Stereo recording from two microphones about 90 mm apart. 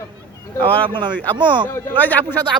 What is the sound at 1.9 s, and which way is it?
Speech, 20° left (ahead or behind).